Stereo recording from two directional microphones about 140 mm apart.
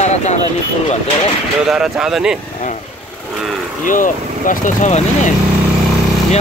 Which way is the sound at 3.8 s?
70° left (ahead or behind).